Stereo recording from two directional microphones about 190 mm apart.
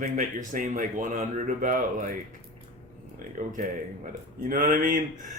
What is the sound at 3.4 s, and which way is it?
Speech, 45° right (ahead or behind).